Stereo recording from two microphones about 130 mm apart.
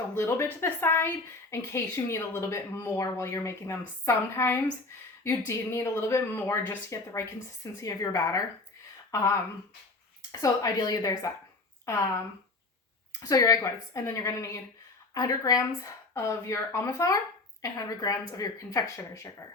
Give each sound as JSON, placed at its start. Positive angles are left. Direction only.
{"t": 0.2, "sound": "a woman's voice", "side_deg": 20}
{"t": 10.4, "sound": "a woman's voice", "side_deg": 30}
{"t": 13.1, "sound": "a woman's voice", "side_deg": 30}